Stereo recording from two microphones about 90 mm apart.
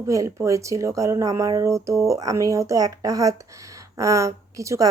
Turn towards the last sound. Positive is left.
turn(degrees=-35)  # may be behind; listen again after turning